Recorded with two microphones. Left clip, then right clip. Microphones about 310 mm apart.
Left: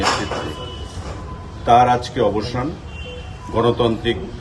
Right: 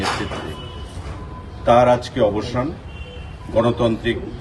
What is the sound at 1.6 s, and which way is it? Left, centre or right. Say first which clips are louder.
Speech: left 1 dB; centre.